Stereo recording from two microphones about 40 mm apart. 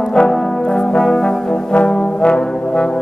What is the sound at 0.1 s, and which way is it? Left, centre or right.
Brass instrument, centre.